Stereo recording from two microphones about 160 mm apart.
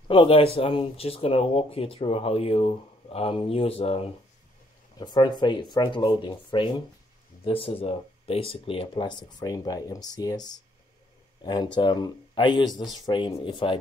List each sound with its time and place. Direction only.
0.1 s speech: 35° left (ahead or behind)
4.9 s speech: 25° left (ahead or behind)